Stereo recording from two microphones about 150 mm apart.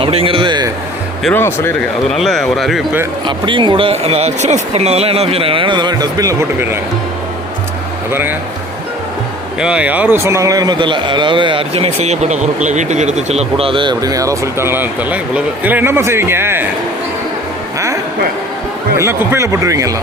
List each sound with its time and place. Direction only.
0.0 s a sound: 40° right (ahead or behind)
1.3 s speech: 15° left (ahead or behind)
2.1 s speech: centre (ahead or behind)
3.2 s speech: 30° right (ahead or behind)
8.1 s speech: 15° right (ahead or behind)
9.6 s a man's voice: 5° right (ahead or behind)
17.7 s a sound: 20° right (ahead or behind)
18.9 s a man's voice: 20° right (ahead or behind)